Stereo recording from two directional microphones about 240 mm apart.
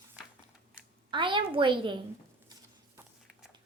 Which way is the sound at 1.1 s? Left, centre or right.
Right.